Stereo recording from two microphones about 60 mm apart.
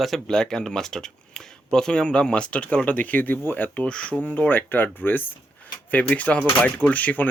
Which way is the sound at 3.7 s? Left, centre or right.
Centre.